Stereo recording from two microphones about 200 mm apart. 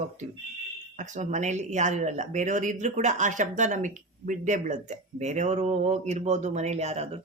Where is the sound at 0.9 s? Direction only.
35° right (ahead or behind).